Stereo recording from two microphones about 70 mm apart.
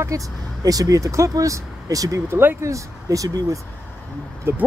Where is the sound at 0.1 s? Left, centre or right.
Right.